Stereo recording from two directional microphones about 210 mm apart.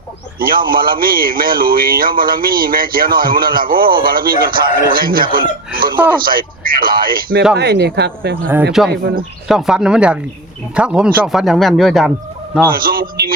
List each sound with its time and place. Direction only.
0.3 s speech: 45° right (ahead or behind)
9.5 s speech: centre (ahead or behind)
12.6 s a man's voice: 45° right (ahead or behind)